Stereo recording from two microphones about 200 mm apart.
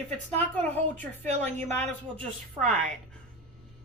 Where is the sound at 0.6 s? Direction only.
10° left (ahead or behind).